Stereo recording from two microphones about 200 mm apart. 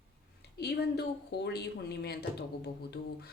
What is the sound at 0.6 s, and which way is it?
A woman's voice, 55° left (ahead or behind).